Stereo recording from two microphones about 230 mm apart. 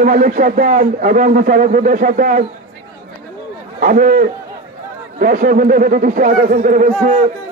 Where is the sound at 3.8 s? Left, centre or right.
Right.